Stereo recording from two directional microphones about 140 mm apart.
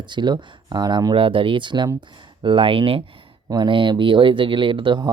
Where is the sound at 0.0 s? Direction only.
35° right (ahead or behind).